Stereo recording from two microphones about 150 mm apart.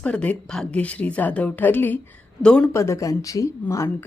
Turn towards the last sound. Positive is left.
turn(degrees=15)  # may be behind; listen again after turning